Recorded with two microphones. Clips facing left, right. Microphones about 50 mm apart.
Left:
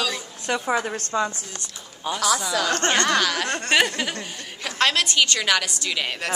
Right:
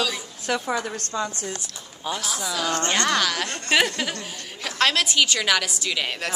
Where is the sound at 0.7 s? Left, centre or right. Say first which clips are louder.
Left 3 dB; left.